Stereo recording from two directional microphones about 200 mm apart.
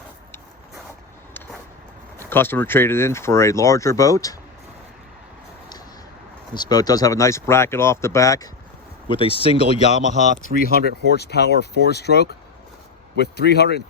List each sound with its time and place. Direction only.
2.1 s speech: 10° left (ahead or behind)
6.5 s speech: 20° left (ahead or behind)
9.0 s speech: 25° left (ahead or behind)
10.5 s speech: 35° right (ahead or behind)
11.1 s speech: 55° left (ahead or behind)